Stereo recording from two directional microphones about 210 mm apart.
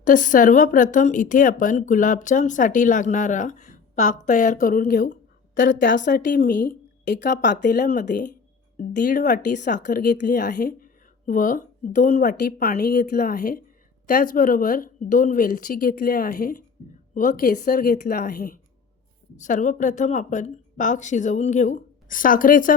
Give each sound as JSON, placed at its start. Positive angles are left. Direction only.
{"t": 0.0, "sound": "speech", "side_deg": 40}
{"t": 7.3, "sound": "speech", "side_deg": 40}